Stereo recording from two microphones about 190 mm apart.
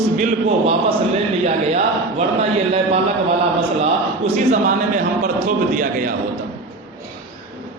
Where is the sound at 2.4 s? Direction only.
30° right (ahead or behind).